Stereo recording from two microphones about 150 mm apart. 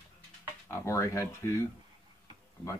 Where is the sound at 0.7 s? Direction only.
20° left (ahead or behind).